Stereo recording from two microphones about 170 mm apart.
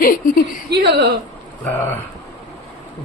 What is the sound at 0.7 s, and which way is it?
Speech, 75° right (ahead or behind).